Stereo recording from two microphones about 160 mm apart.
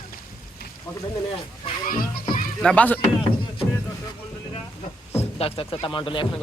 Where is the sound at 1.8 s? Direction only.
65° left (ahead or behind).